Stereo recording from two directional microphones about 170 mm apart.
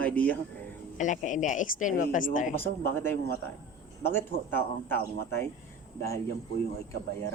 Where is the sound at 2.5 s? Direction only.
15° left (ahead or behind).